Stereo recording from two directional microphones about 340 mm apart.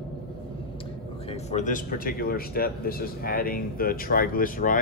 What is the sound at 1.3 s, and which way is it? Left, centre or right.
Speech, left.